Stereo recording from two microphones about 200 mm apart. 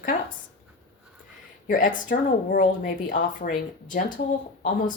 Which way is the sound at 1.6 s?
40° left (ahead or behind).